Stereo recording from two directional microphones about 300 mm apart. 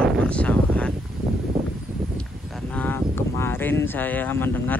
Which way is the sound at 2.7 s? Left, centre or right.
Centre.